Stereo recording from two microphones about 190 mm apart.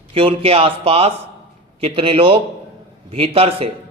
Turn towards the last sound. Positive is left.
turn(degrees=-30)  # may be behind; listen again after turning